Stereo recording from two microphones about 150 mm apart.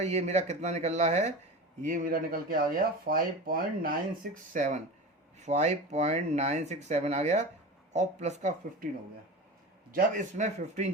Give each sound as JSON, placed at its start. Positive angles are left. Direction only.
{"t": 0.0, "sound": "speech", "side_deg": -45}
{"t": 1.8, "sound": "speech", "side_deg": -60}
{"t": 9.9, "sound": "speech", "side_deg": -55}